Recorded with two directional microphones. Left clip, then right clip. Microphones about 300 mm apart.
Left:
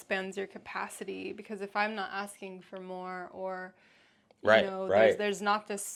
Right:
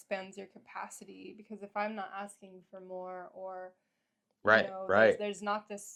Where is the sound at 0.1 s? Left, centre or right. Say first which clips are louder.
Left 6 dB; centre.